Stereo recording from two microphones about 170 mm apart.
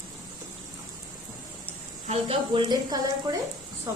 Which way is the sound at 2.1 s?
30° right (ahead or behind).